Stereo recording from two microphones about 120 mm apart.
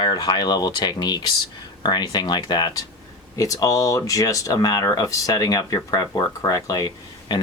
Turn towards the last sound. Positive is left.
turn(degrees=35)  # may be behind; listen again after turning